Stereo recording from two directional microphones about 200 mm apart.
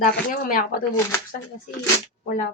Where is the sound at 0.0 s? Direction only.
45° left (ahead or behind).